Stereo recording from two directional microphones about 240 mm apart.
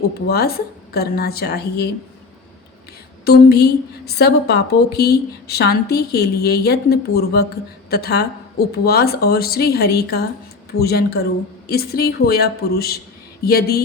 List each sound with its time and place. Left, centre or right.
0.3 s a woman's voice: left
3.2 s a woman's voice: left